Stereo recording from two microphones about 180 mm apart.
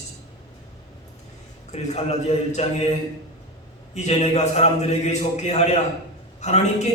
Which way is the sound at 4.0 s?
40° left (ahead or behind).